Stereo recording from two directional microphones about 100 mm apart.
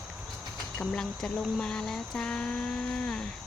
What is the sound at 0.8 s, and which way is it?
Speech, 10° left (ahead or behind).